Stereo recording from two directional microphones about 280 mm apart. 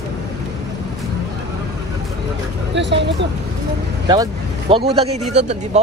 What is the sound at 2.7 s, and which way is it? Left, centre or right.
Vehicle, right.